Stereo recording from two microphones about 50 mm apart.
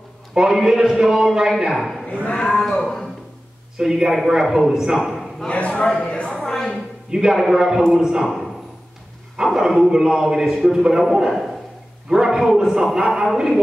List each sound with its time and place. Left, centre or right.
0.3 s a man's voice: centre
3.7 s a man's voice: centre
4.9 s a sound: centre
5.5 s a man's voice: left
6.3 s a sound: centre
7.1 s a man's voice: centre
9.4 s a man's voice: centre